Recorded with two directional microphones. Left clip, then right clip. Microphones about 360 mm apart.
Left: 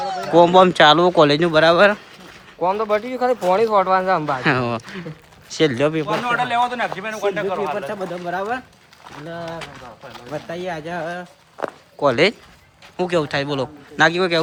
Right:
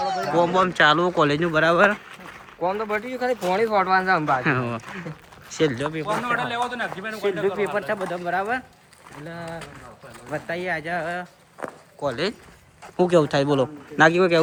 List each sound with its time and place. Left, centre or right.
0.0 s speech: centre
2.6 s speech: left
3.1 s speech: centre
7.9 s speech: centre
13.0 s speech: centre